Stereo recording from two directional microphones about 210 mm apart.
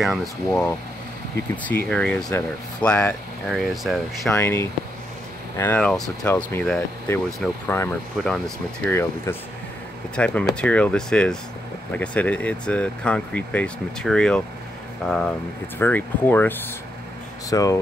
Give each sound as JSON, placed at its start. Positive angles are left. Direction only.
{"t": 0.0, "sound": "speech", "side_deg": 0}
{"t": 4.4, "sound": "speech", "side_deg": 10}